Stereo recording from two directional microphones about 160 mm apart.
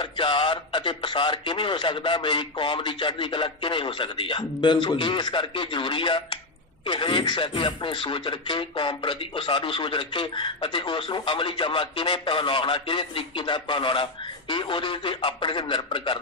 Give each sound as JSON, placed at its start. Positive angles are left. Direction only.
{"t": 0.0, "sound": "speech", "side_deg": 30}